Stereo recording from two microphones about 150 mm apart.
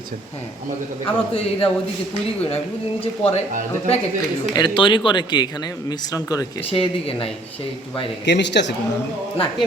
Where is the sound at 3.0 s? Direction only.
40° left (ahead or behind).